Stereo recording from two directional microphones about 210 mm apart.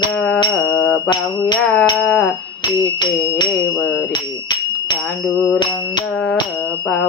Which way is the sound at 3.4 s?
15° left (ahead or behind).